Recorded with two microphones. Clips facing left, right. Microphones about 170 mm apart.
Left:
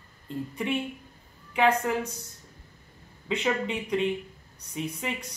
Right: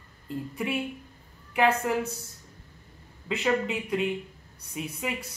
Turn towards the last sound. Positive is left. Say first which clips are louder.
# even
turn(degrees=-5)  # may be behind; listen again after turning